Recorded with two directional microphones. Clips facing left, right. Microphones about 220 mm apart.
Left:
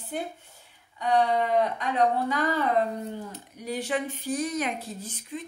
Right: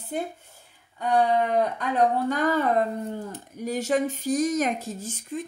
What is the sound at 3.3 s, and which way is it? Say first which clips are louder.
Speech: right 4 dB; 45° right (ahead or behind).